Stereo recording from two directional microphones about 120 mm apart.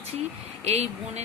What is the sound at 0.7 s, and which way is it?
Speech, 65° right (ahead or behind).